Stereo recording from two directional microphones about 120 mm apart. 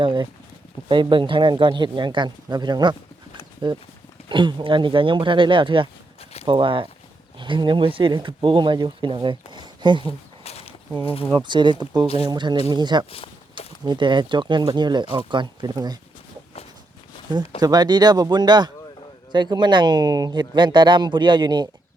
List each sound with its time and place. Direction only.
0.0 s speech: 40° right (ahead or behind)
10.1 s a sound: 60° left (ahead or behind)
11.0 s speech: 50° left (ahead or behind)
11.3 s speech: 40° right (ahead or behind)
12.0 s speech: 55° left (ahead or behind)
12.3 s speech: 35° right (ahead or behind)
13.1 s speech: 50° left (ahead or behind)
13.8 s speech: 40° right (ahead or behind)
17.6 s speech: 35° right (ahead or behind)